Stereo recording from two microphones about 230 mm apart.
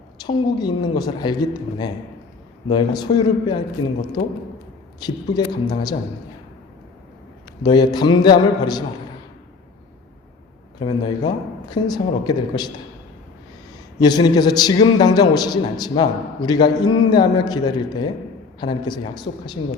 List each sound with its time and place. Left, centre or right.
0.2 s a man's voice: centre
4.9 s a man's voice: centre
7.6 s a man's voice: centre
10.8 s a man's voice: centre
14.0 s a man's voice: centre